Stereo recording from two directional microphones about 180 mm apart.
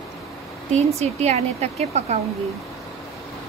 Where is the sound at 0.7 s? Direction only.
35° right (ahead or behind).